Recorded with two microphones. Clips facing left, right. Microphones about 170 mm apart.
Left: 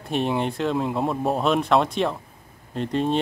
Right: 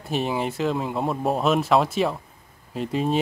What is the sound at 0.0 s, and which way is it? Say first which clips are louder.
Speech: left 1 dB; centre (ahead or behind).